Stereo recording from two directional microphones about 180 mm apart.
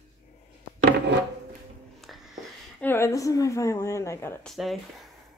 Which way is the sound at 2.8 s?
15° left (ahead or behind).